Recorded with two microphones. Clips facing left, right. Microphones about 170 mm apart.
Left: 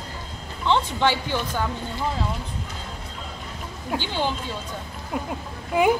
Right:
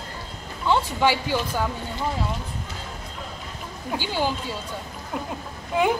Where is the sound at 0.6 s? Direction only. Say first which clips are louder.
Even; 10° right (ahead or behind).